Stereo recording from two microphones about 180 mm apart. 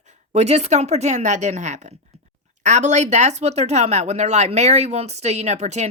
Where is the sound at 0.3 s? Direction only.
35° right (ahead or behind).